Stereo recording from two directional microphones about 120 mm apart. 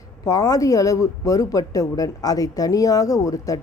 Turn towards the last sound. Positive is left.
turn(degrees=30)  # may be behind; listen again after turning